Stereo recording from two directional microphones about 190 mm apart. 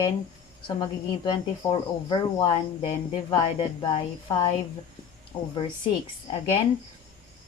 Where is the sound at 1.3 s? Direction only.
25° left (ahead or behind).